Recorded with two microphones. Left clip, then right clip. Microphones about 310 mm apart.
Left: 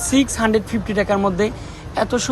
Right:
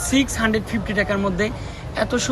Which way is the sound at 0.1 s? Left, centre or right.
Centre.